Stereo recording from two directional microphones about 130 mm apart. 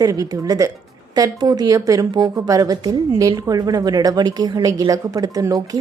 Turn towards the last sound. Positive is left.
turn(degrees=-25)  # may be behind; listen again after turning